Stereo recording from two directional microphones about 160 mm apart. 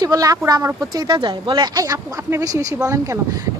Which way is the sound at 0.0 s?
25° right (ahead or behind).